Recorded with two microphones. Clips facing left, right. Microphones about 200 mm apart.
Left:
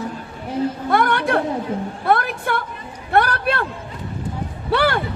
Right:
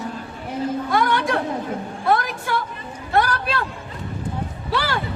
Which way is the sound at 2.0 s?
60° left (ahead or behind).